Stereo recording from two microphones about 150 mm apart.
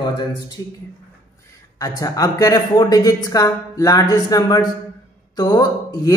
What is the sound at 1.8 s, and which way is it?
Speech, 20° left (ahead or behind).